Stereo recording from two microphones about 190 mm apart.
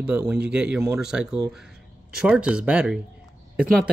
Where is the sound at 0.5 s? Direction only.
5° right (ahead or behind).